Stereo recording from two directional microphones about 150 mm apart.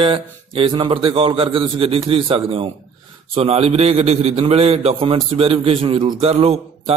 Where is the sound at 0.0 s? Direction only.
35° right (ahead or behind).